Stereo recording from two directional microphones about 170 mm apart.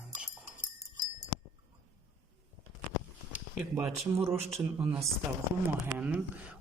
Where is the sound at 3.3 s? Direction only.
15° right (ahead or behind).